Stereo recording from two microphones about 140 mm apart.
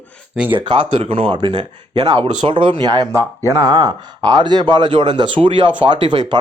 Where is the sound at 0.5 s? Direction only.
35° right (ahead or behind).